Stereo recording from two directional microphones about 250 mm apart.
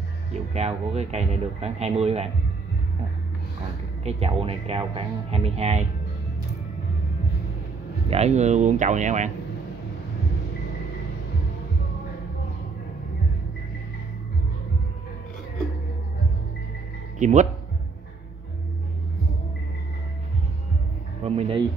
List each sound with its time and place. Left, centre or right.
0.3 s speech: right
4.0 s speech: right
8.1 s speech: right
17.2 s speech: right
21.2 s speech: right